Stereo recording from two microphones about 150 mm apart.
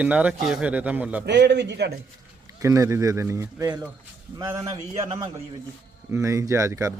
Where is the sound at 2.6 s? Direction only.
20° right (ahead or behind).